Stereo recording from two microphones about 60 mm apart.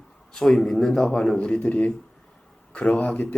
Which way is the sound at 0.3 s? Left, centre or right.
Centre.